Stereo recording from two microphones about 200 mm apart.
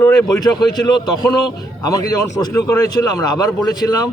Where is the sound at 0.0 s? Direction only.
20° left (ahead or behind).